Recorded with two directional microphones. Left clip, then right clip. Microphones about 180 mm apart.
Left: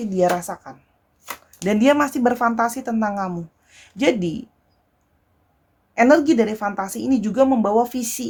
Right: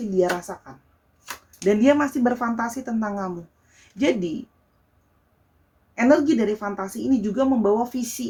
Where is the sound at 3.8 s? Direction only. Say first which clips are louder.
Left 4 dB; 50° left (ahead or behind).